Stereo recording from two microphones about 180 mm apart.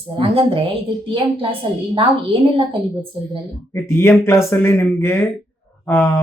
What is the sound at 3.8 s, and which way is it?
Speech, 15° left (ahead or behind).